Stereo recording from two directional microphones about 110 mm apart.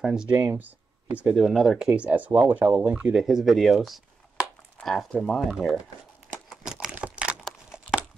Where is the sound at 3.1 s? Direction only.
Centre (ahead or behind).